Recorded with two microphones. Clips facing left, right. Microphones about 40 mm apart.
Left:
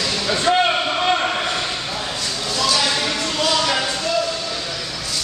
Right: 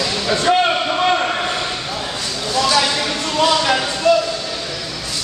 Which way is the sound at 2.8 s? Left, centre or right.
Centre.